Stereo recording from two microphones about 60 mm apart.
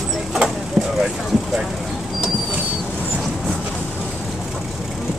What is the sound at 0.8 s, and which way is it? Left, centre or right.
Vehicle, centre.